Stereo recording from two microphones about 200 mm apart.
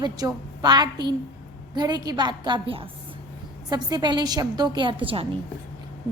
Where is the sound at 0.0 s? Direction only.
20° right (ahead or behind).